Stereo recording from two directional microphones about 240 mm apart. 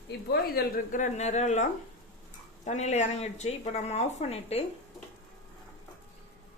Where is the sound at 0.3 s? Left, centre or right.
Left.